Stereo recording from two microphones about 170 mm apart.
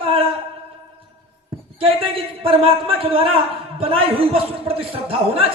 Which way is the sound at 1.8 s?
30° right (ahead or behind).